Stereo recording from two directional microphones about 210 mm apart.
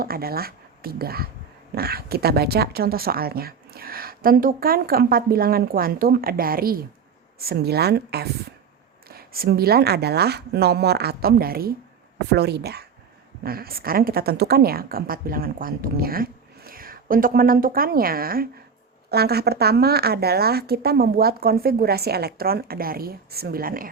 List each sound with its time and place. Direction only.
0.0 s speech: 45° right (ahead or behind)